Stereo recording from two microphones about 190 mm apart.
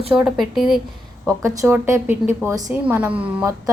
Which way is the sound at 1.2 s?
15° right (ahead or behind).